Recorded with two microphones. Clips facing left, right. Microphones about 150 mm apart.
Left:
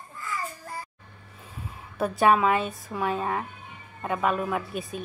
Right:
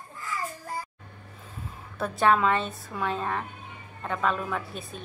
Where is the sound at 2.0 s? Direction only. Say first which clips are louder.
Left 2 dB; 15° left (ahead or behind).